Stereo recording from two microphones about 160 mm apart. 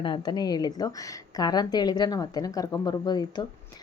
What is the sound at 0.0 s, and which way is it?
Speech, 30° left (ahead or behind).